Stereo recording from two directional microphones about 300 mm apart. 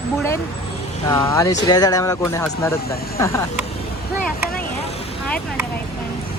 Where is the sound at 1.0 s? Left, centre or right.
Centre.